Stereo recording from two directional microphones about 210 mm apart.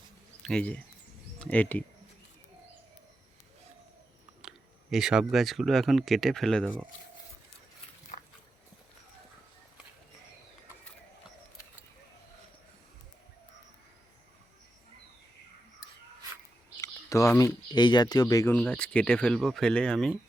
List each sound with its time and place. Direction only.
0.4 s speech: 5° left (ahead or behind)
4.4 s speech: 5° right (ahead or behind)
8.1 s a sound: 35° left (ahead or behind)
16.8 s speech: 15° left (ahead or behind)